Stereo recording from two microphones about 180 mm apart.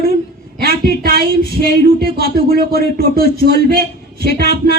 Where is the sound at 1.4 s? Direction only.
65° left (ahead or behind).